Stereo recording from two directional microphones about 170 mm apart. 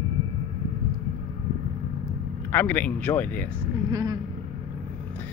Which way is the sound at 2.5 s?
10° left (ahead or behind).